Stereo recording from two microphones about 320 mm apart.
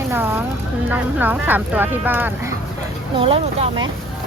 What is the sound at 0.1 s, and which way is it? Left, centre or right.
Speech, centre.